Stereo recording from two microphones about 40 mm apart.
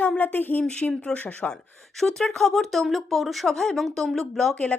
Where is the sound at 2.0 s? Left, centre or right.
Centre.